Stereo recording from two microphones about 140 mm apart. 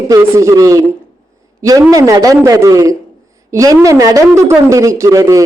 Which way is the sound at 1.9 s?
25° right (ahead or behind).